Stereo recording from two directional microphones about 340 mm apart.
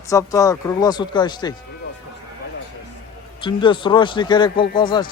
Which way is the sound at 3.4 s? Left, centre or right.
Centre.